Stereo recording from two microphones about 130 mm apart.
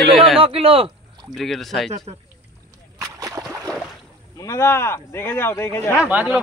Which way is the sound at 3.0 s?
25° right (ahead or behind).